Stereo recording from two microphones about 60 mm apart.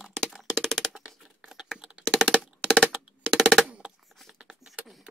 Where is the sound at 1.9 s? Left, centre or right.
Centre.